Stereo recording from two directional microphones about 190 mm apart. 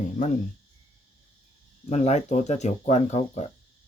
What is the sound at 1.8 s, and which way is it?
Speech, 35° left (ahead or behind).